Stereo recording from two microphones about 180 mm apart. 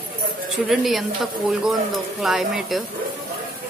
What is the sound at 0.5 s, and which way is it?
A woman's voice, centre (ahead or behind).